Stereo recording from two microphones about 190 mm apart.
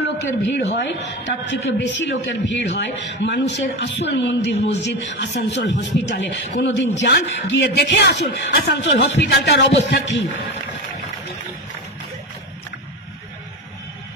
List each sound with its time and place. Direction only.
0.7 s a man's voice: 70° left (ahead or behind)